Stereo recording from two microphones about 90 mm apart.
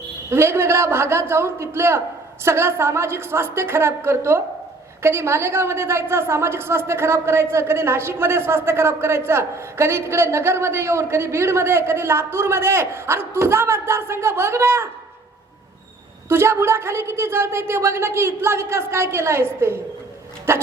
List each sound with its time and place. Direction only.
0.3 s a woman's voice: 30° right (ahead or behind)
16.3 s a woman's voice: 30° right (ahead or behind)